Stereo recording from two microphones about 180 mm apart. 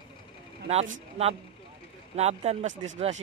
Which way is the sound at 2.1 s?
35° right (ahead or behind).